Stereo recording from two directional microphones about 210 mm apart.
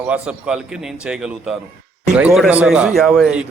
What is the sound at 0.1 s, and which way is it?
A man's voice, 5° right (ahead or behind).